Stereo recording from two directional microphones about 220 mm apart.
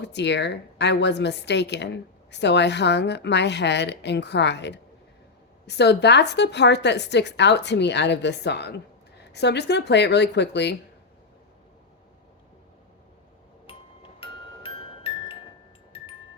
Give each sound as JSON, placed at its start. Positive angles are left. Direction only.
{"t": 0.0, "sound": "a woman's voice", "side_deg": 50}
{"t": 14.2, "sound": "music", "side_deg": 25}